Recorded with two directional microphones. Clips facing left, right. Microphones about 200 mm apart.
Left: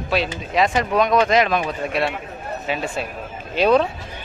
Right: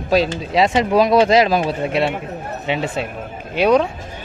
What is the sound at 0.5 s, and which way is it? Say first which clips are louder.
Speech: right 4 dB; 25° right (ahead or behind).